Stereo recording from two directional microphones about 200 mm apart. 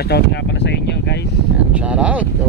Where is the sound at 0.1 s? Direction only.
60° left (ahead or behind).